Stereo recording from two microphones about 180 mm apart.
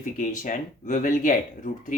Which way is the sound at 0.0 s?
45° left (ahead or behind).